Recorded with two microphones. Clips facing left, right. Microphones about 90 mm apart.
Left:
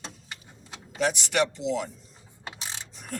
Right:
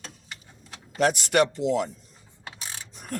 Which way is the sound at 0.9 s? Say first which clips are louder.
Right 4 dB; 50° right (ahead or behind).